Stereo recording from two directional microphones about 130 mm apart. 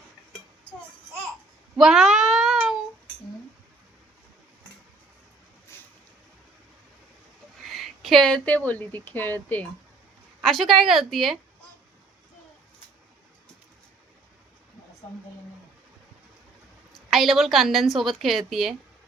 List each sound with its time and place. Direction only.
1.7 s a sound: 5° right (ahead or behind)
5.7 s boat: 20° left (ahead or behind)
7.6 s speech: centre (ahead or behind)
10.4 s a woman's voice: centre (ahead or behind)
17.1 s a woman's voice: centre (ahead or behind)